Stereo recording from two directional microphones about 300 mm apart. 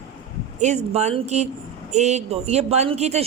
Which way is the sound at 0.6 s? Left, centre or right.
Right.